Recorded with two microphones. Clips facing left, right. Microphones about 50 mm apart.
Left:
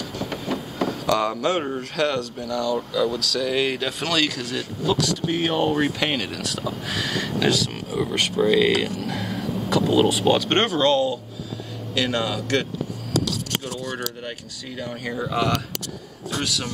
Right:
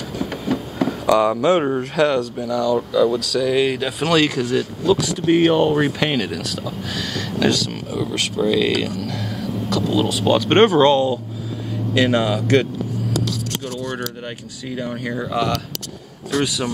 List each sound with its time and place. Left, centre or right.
0.3 s a sound: centre
1.7 s a man's voice: right
2.0 s speech: centre
4.1 s speech: centre
6.6 s speech: centre
10.1 s speech: centre
10.5 s a man's voice: centre
14.2 s speech: centre
16.4 s speech: centre